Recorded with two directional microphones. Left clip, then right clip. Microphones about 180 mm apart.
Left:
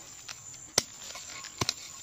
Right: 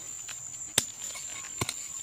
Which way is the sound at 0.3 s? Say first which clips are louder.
Right 3 dB; centre (ahead or behind).